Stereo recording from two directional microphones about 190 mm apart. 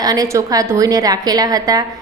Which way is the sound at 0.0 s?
20° right (ahead or behind).